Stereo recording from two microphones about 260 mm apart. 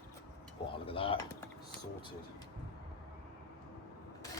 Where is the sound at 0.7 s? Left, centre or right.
Left.